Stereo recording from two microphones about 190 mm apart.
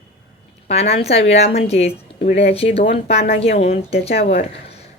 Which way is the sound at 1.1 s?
30° left (ahead or behind).